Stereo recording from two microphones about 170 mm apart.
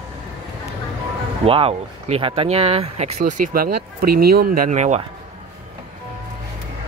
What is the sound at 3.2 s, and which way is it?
Speech, 55° right (ahead or behind).